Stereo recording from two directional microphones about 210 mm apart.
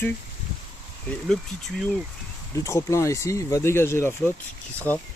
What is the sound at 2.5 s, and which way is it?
Speech, 15° left (ahead or behind).